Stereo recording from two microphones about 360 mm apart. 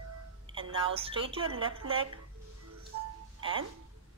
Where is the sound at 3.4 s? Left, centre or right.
Centre.